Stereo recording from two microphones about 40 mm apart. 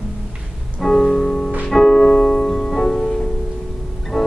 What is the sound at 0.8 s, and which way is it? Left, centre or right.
Music, centre.